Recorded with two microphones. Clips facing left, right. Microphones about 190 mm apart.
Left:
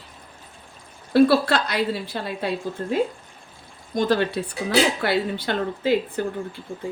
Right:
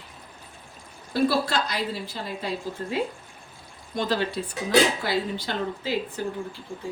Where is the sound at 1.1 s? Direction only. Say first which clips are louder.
Left 7 dB; 65° left (ahead or behind).